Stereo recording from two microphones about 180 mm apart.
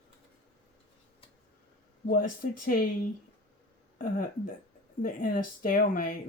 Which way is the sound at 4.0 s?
50° left (ahead or behind).